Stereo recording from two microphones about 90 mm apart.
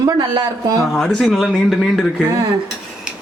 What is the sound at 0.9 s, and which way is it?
Speech, centre (ahead or behind).